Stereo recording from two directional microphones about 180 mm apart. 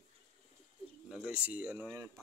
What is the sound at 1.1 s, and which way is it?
Speech, 5° right (ahead or behind).